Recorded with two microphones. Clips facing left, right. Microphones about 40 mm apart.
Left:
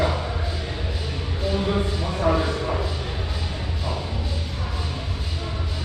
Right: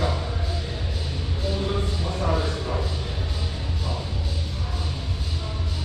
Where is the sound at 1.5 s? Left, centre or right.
Centre.